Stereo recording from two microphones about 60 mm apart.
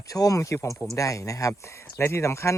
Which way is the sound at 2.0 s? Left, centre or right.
Left.